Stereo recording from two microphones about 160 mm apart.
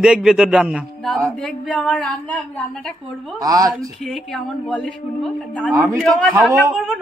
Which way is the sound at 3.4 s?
20° right (ahead or behind).